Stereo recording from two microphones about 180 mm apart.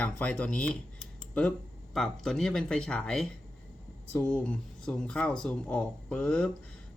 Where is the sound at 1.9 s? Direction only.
Centre (ahead or behind).